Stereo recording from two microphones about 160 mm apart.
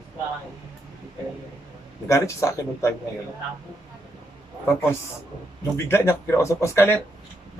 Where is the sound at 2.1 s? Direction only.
20° left (ahead or behind).